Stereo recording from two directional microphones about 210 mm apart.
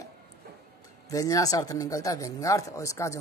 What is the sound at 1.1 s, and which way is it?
Speech, 15° left (ahead or behind).